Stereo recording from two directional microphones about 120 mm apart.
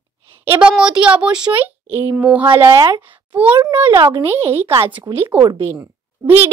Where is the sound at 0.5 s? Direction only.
10° right (ahead or behind).